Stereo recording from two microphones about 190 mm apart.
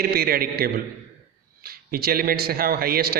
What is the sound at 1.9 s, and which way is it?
Speech, 50° right (ahead or behind).